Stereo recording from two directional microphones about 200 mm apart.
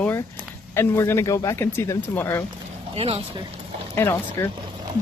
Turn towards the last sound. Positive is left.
turn(degrees=15)  # may be behind; listen again after turning